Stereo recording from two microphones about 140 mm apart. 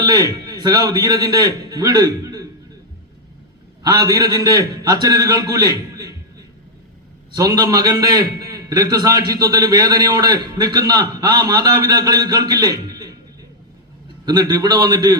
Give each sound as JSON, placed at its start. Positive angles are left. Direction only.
{"t": 0.0, "sound": "a man's voice", "side_deg": -30}
{"t": 3.8, "sound": "a man's voice", "side_deg": -25}
{"t": 7.3, "sound": "a man's voice", "side_deg": -25}
{"t": 14.3, "sound": "a man's voice", "side_deg": -30}